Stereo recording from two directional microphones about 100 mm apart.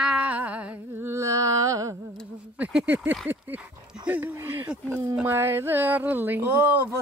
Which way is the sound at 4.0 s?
15° right (ahead or behind).